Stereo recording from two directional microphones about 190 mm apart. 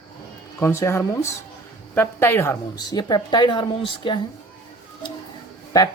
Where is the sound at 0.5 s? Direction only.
15° left (ahead or behind).